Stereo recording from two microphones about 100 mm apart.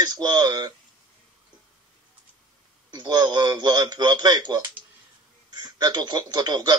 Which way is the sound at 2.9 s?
45° right (ahead or behind).